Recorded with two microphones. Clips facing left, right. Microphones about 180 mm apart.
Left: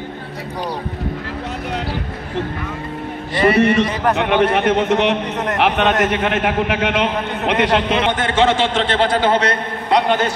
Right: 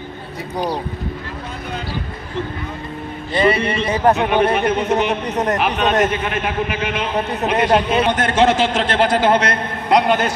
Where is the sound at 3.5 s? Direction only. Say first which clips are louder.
Left 5 dB; 80° left.